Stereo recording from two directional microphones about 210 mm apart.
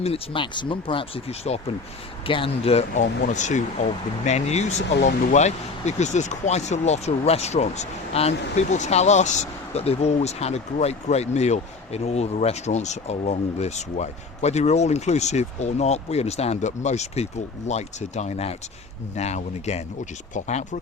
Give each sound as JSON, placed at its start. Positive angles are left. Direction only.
{"t": 0.0, "sound": "speech", "side_deg": 25}
{"t": 4.8, "sound": "speech", "side_deg": 55}
{"t": 5.0, "sound": "speech", "side_deg": 35}